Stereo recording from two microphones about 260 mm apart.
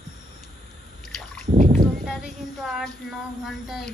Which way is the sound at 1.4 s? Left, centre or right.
Right.